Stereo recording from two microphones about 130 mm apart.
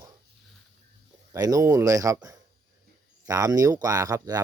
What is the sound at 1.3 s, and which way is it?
Speech, 25° right (ahead or behind).